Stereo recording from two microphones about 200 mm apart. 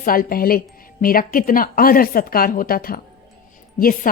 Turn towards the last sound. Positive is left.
turn(degrees=45)  # may be behind; listen again after turning